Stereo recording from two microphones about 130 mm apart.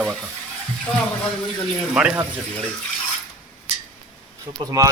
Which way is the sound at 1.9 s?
5° right (ahead or behind).